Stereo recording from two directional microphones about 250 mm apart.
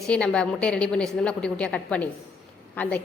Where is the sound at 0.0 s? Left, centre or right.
Centre.